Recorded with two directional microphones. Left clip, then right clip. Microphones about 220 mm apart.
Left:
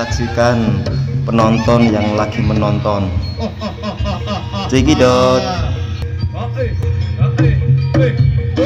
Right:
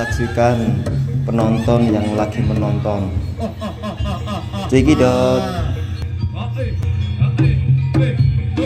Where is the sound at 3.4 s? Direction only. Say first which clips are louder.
Left 2 dB; 40° left (ahead or behind).